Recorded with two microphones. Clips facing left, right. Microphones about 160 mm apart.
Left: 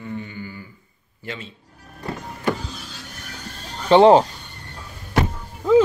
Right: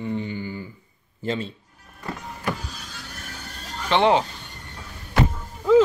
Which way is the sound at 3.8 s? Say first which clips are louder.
Left 7 dB; 35° left (ahead or behind).